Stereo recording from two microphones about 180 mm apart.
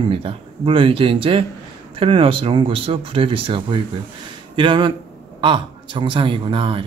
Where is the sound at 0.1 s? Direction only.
30° right (ahead or behind).